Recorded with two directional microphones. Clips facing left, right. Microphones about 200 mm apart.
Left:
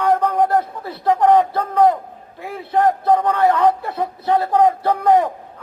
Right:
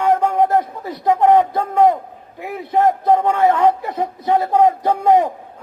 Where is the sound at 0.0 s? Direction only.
15° right (ahead or behind).